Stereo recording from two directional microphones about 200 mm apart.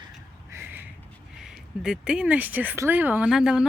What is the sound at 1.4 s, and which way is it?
Speech, 5° right (ahead or behind).